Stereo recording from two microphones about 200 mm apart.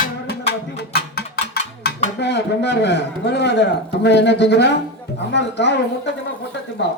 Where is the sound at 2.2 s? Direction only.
60° left (ahead or behind).